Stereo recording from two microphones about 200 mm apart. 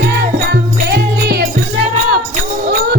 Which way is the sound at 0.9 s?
55° right (ahead or behind).